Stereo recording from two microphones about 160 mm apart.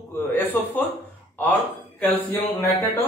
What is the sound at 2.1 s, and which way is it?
Speech, 15° left (ahead or behind).